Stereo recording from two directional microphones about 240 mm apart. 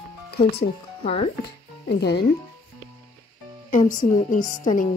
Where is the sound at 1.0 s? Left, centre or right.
Left.